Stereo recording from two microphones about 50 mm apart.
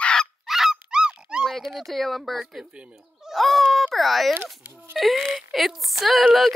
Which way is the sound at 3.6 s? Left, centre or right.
Centre.